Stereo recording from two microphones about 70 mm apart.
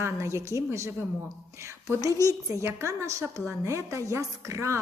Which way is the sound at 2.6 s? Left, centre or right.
Right.